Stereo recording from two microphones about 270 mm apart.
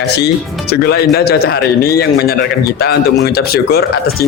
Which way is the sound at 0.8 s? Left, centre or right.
Left.